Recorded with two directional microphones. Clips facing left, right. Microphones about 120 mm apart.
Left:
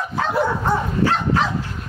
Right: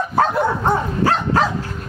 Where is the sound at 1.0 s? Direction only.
40° right (ahead or behind).